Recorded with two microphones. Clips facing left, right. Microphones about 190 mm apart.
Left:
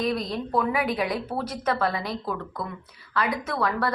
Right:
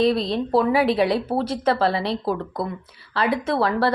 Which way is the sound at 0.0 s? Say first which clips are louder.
Right 7 dB; 30° right (ahead or behind).